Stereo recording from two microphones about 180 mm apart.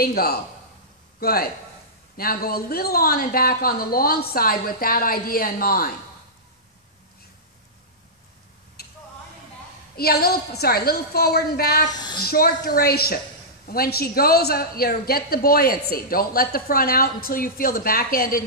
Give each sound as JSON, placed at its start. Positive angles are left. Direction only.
{"t": 0.0, "sound": "a woman's voice", "side_deg": 60}
{"t": 9.9, "sound": "a woman's voice", "side_deg": 60}
{"t": 11.9, "sound": "a woman's voice", "side_deg": 25}
{"t": 12.3, "sound": "a woman's voice", "side_deg": 55}